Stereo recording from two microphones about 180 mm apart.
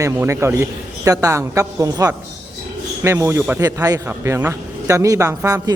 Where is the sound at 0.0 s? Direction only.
15° right (ahead or behind).